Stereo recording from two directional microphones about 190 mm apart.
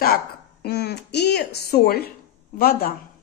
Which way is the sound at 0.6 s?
60° left (ahead or behind).